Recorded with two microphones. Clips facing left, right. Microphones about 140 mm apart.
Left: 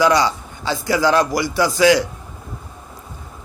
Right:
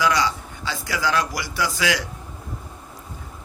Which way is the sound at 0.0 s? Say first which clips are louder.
Left 6 dB; 30° left (ahead or behind).